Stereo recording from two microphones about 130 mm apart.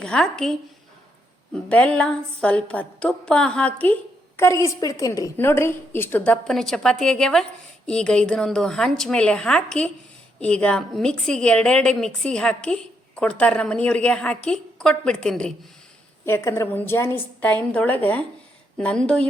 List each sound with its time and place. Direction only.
0.0 s a woman's voice: 5° left (ahead or behind)
1.5 s a woman's voice: 10° left (ahead or behind)
4.4 s a woman's voice: 25° left (ahead or behind); by 15.5 s 5° left (ahead or behind)
16.2 s a woman's voice: 20° left (ahead or behind)